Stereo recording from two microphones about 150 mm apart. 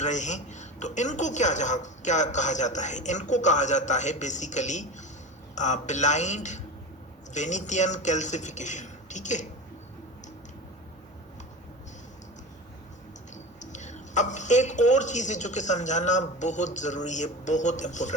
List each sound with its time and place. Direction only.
0.0 s a man's voice: 50° left (ahead or behind)
13.3 s speech: 50° left (ahead or behind)